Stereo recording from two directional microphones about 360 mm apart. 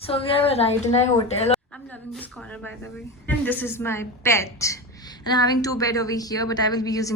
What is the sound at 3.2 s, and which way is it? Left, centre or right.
A woman's voice, centre.